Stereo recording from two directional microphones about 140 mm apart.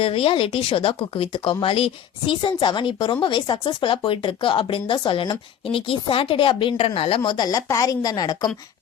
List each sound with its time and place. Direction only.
0.0 s a woman's voice: 40° left (ahead or behind)
7.3 s a woman's voice: 30° left (ahead or behind)